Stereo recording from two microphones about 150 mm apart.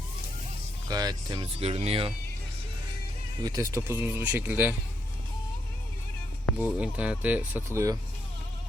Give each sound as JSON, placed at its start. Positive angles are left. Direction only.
{"t": 0.9, "sound": "speech", "side_deg": -25}
{"t": 1.5, "sound": "speech", "side_deg": -45}
{"t": 3.4, "sound": "speech", "side_deg": -25}
{"t": 6.6, "sound": "speech", "side_deg": -10}